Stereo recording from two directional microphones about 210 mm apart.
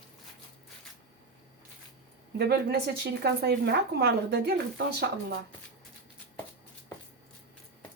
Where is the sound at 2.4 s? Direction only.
50° right (ahead or behind).